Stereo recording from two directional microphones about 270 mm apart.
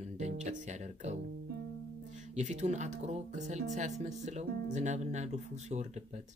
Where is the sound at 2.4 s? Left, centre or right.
Right.